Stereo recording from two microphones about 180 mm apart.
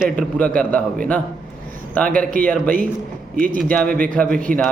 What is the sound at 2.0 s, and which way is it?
Speech, 5° left (ahead or behind).